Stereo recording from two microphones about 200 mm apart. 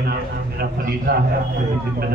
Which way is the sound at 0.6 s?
50° right (ahead or behind).